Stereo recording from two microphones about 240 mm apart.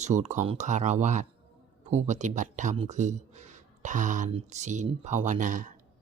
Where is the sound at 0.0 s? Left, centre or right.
Right.